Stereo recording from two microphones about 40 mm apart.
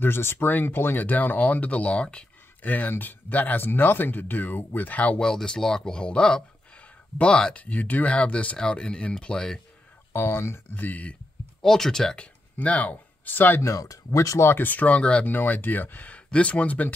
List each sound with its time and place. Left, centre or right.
0.0 s speech: left
0.5 s speech: left
2.6 s speech: left
5.2 s speech: centre
6.8 s a sound: left
7.5 s speech: left
8.5 s speech: left
10.1 s speech: left
10.8 s speech: left
11.6 s speech: centre
12.5 s speech: left
14.6 s speech: left
15.3 s speech: left
16.1 s speech: left